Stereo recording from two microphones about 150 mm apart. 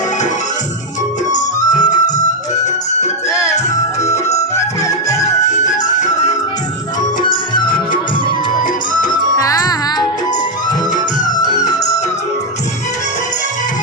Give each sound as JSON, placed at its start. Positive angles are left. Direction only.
{"t": 1.5, "sound": "music", "side_deg": 25}
{"t": 4.5, "sound": "music", "side_deg": 20}
{"t": 5.5, "sound": "music", "side_deg": 55}
{"t": 7.2, "sound": "music", "side_deg": 30}
{"t": 9.0, "sound": "music", "side_deg": 25}